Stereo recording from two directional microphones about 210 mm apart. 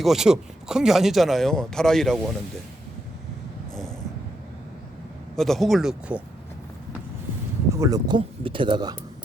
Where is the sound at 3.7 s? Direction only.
Centre (ahead or behind).